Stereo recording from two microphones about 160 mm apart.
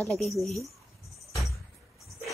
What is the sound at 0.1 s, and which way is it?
Speech, centre (ahead or behind).